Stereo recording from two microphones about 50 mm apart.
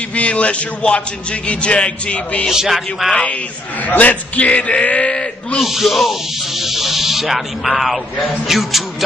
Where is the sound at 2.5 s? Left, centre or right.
Centre.